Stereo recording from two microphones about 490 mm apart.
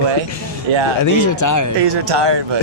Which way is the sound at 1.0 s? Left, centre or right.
Left.